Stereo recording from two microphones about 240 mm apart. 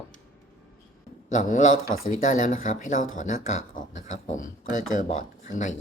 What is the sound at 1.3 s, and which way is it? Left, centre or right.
Speech, left.